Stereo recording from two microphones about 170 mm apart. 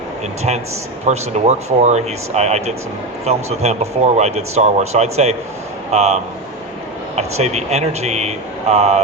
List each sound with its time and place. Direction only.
1.0 s speech: 40° right (ahead or behind)
7.2 s speech: 40° right (ahead or behind)